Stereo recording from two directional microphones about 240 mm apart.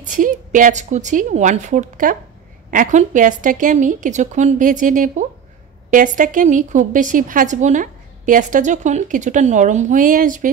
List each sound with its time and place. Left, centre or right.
0.0 s a woman's voice: right